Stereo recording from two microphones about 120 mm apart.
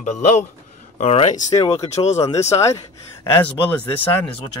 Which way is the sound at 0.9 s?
65° left (ahead or behind).